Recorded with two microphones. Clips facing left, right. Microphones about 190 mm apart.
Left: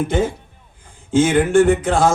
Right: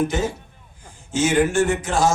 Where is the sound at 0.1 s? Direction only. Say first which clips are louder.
Left 5 dB; 55° left (ahead or behind).